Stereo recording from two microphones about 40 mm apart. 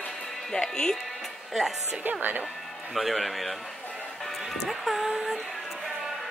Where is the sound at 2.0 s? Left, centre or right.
Right.